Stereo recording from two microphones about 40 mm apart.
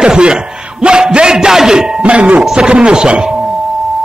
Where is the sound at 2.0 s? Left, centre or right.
Right.